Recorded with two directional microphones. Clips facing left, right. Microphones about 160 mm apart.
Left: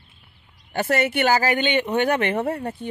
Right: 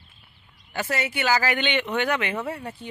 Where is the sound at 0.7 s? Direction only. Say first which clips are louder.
Left 6 dB; 55° left (ahead or behind).